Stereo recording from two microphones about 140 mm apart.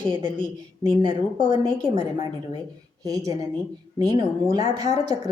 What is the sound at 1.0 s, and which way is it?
Speech, 30° right (ahead or behind).